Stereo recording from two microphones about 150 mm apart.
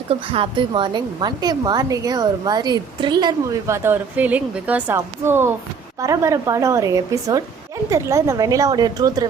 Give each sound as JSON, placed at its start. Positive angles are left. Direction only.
{"t": 0.1, "sound": "a woman's voice", "side_deg": -35}